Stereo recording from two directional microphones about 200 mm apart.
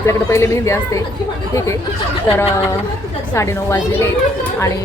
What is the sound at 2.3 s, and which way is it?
Speech, 10° left (ahead or behind).